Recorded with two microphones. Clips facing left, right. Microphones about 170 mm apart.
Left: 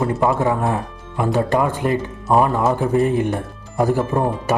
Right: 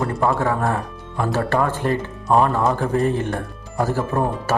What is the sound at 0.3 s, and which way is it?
Speech, 20° left (ahead or behind).